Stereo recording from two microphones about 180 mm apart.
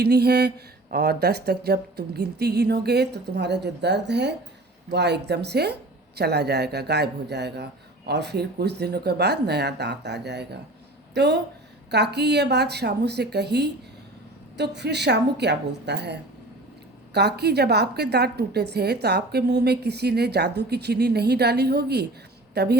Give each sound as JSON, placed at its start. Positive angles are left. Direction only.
{"t": 0.0, "sound": "a woman's voice", "side_deg": -65}
{"t": 17.2, "sound": "a woman's voice", "side_deg": -65}